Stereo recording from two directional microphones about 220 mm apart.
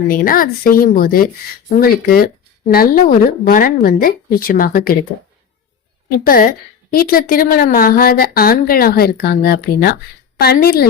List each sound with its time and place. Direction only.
0.1 s speech: 40° left (ahead or behind)
6.1 s a woman's voice: 40° left (ahead or behind)